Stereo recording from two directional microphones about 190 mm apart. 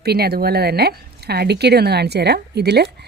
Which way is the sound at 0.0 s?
55° right (ahead or behind).